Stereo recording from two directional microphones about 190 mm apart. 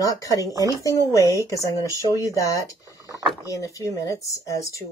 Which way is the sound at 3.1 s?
20° right (ahead or behind).